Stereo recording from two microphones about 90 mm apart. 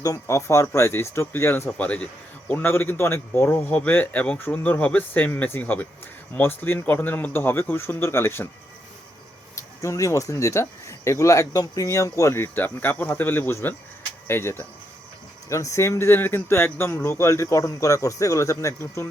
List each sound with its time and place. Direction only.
0.0 s a man's voice: 35° left (ahead or behind)
9.6 s a man's voice: 35° left (ahead or behind)